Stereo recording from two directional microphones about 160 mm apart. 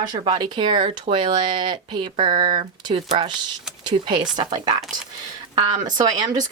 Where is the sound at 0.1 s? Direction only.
30° right (ahead or behind).